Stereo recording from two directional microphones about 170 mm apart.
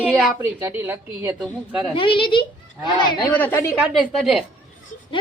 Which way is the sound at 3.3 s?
10° left (ahead or behind).